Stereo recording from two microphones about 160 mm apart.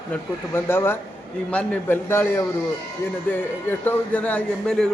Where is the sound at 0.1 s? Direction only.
15° left (ahead or behind).